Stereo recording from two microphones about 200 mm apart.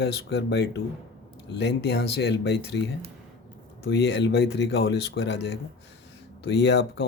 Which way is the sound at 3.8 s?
60° left (ahead or behind).